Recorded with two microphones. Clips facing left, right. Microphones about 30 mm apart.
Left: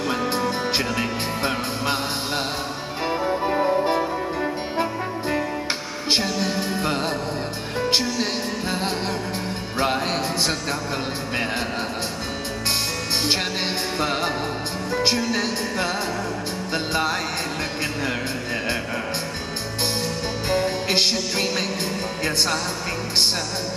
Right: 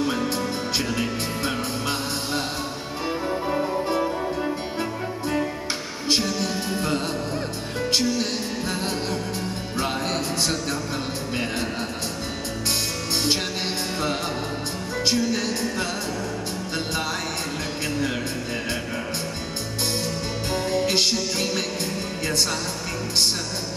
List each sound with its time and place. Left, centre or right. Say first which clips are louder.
0.2 s music: left 3 dB; left
3.4 s music: left 5 dB; left
6.0 s music: left 1 dB; left
13.9 s music: left 4 dB; left
20.9 s music: left 1 dB; centre